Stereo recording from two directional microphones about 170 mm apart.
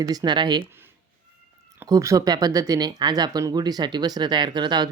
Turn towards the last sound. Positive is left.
turn(degrees=-25)  # may be behind; listen again after turning